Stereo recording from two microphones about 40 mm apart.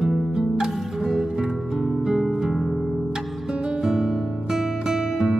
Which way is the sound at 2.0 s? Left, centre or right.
Centre.